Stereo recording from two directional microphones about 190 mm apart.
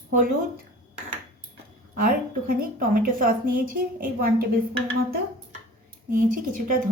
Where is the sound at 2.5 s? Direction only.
50° right (ahead or behind).